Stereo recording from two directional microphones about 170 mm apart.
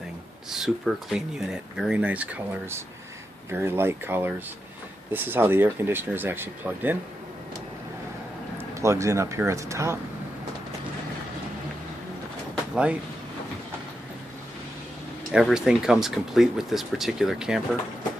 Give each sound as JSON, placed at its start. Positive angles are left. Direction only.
{"t": 0.5, "sound": "speech", "side_deg": 0}
{"t": 8.5, "sound": "speech", "side_deg": -15}
{"t": 12.7, "sound": "speech", "side_deg": -5}
{"t": 15.3, "sound": "speech", "side_deg": -5}